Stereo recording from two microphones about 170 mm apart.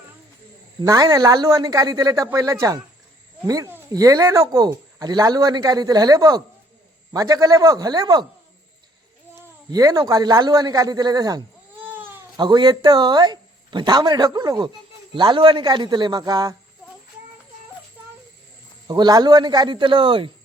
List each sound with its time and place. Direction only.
0.8 s speech: 20° right (ahead or behind)
9.6 s speech: 20° right (ahead or behind)
11.8 s baby cry: 10° right (ahead or behind)
12.4 s speech: 25° right (ahead or behind)
18.9 s speech: 25° right (ahead or behind)